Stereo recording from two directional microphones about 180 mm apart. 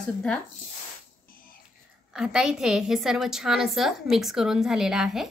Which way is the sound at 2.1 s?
5° right (ahead or behind).